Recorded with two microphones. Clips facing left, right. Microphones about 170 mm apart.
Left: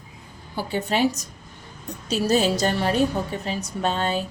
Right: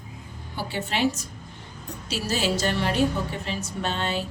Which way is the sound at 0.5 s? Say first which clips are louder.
Left 4 dB; 45° left (ahead or behind).